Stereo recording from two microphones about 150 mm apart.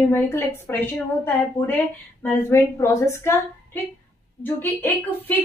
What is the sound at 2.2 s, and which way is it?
A woman's voice, 15° left (ahead or behind).